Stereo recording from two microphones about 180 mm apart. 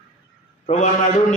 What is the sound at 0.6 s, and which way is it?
Speech, 40° left (ahead or behind).